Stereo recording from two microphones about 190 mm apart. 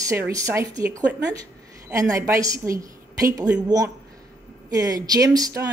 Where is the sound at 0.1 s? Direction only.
15° right (ahead or behind).